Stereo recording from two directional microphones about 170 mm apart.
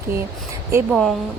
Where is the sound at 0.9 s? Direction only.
Centre (ahead or behind).